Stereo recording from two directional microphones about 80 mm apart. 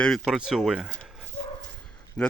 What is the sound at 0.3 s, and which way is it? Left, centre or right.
Speech, centre.